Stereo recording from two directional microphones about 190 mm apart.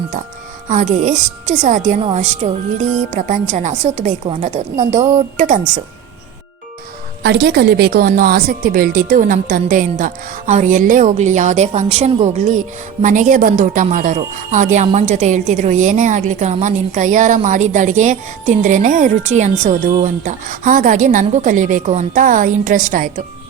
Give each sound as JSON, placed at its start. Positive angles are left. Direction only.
{"t": 0.7, "sound": "a woman's voice", "side_deg": -40}
{"t": 7.2, "sound": "a woman's voice", "side_deg": -60}